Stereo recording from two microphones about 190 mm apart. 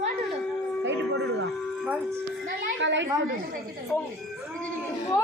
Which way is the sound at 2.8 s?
75° right (ahead or behind).